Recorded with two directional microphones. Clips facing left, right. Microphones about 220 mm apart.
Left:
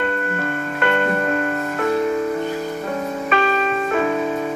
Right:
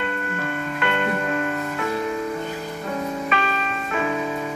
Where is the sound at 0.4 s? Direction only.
45° left (ahead or behind).